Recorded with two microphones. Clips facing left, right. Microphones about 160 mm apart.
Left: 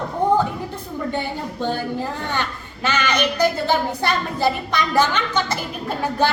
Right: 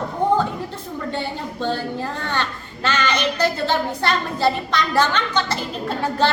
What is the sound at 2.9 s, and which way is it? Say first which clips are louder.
A woman's voice: even; 15° left (ahead or behind).